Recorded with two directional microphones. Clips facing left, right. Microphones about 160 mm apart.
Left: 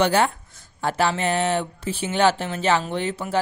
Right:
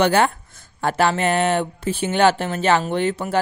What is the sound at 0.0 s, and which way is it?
Speech, 60° right (ahead or behind).